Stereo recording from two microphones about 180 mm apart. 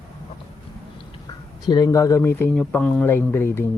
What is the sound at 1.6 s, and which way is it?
A man's voice, 20° left (ahead or behind).